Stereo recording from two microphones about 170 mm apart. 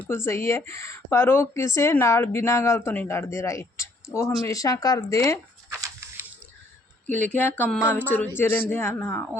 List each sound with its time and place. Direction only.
0.1 s speech: 15° left (ahead or behind)
7.2 s speech: 10° left (ahead or behind)